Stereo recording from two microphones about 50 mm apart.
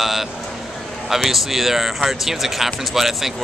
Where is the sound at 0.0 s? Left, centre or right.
Centre.